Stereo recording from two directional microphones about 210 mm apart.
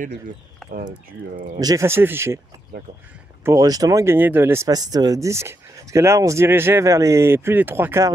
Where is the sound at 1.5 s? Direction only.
15° right (ahead or behind).